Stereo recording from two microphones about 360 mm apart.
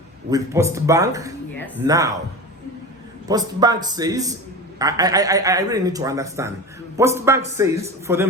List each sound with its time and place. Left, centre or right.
0.3 s a man's voice: centre
1.5 s music: centre
1.9 s a man's voice: centre
3.2 s a man's voice: centre